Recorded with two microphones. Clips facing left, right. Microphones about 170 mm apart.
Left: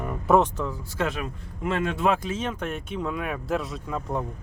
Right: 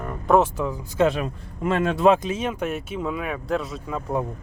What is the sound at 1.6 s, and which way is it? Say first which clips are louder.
Speech: right 4 dB; 40° right (ahead or behind).